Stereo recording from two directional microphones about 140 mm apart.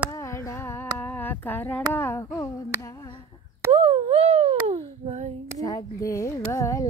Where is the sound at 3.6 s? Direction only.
45° right (ahead or behind).